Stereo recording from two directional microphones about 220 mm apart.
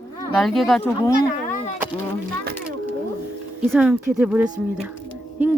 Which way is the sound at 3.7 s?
5° right (ahead or behind).